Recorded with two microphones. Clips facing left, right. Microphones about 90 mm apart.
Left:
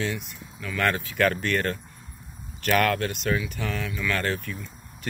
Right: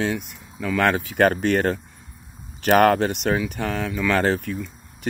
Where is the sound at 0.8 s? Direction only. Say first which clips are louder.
Right 5 dB; 65° right (ahead or behind).